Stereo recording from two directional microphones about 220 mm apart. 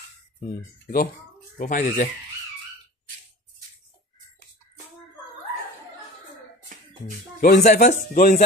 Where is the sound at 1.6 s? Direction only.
40° left (ahead or behind).